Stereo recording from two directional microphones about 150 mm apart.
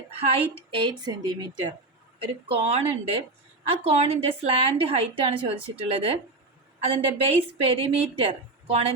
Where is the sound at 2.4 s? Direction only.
40° right (ahead or behind).